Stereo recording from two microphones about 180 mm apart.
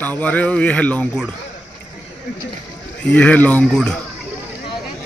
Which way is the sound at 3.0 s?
5° left (ahead or behind).